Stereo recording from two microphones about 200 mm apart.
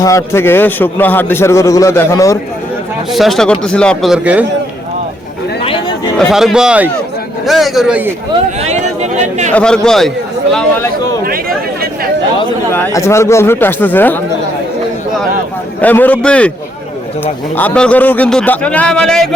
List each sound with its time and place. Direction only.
0.0 s a man's voice: 15° left (ahead or behind)
3.1 s speech: centre (ahead or behind)
6.1 s speech: centre (ahead or behind)
8.6 s speech: 35° right (ahead or behind)
9.5 s speech: 5° left (ahead or behind)
11.3 s a sound: 45° right (ahead or behind)
12.7 s a man's voice: 15° left (ahead or behind)
15.8 s a man's voice: 10° left (ahead or behind)
17.6 s a man's voice: 5° left (ahead or behind)